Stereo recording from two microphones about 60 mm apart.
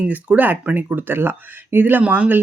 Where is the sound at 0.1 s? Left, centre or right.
Right.